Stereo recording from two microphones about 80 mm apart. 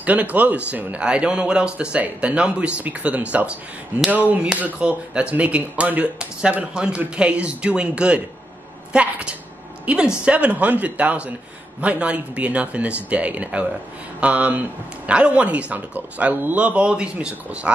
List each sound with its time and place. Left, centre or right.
0.0 s speech: centre